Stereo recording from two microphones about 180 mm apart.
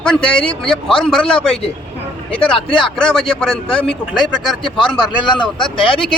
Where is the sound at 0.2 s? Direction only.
30° left (ahead or behind).